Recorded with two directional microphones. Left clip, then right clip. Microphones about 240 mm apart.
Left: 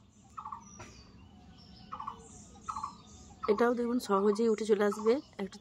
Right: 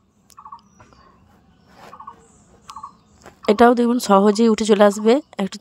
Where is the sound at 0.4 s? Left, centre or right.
Left.